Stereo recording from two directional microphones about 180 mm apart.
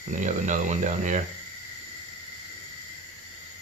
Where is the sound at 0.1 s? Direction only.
45° right (ahead or behind).